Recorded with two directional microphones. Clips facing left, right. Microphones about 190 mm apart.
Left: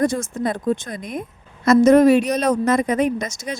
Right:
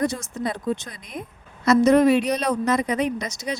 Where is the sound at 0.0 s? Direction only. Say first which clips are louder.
Left 5 dB; 50° left (ahead or behind).